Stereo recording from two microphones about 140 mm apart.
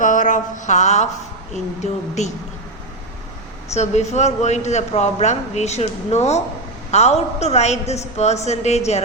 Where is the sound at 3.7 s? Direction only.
50° left (ahead or behind).